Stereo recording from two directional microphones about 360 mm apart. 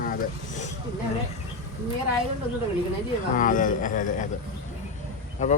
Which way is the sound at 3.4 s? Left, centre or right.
Left.